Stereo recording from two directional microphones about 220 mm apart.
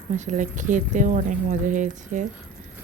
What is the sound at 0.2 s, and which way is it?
Speech, 35° right (ahead or behind).